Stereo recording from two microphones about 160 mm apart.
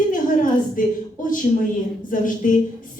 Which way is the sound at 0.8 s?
55° left (ahead or behind).